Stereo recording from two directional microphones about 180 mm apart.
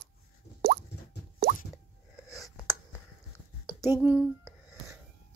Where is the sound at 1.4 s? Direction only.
65° right (ahead or behind).